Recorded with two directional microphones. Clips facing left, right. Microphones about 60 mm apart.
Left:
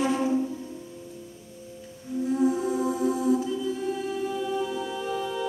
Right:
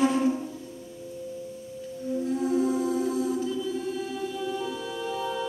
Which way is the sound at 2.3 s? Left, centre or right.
Left.